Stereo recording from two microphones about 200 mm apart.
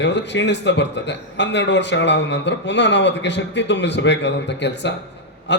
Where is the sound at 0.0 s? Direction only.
60° left (ahead or behind).